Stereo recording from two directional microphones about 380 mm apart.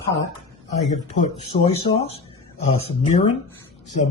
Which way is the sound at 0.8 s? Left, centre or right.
Centre.